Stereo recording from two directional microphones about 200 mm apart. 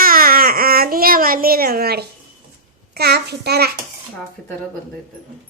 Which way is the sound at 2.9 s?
55° right (ahead or behind).